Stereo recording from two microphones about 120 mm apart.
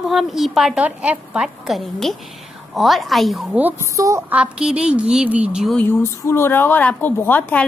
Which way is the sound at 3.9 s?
25° right (ahead or behind).